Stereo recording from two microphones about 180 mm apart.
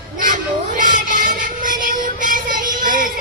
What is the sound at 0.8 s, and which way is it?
Music, 45° right (ahead or behind).